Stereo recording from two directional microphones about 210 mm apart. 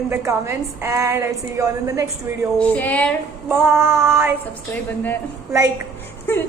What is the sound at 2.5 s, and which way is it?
Female singing, 5° left (ahead or behind).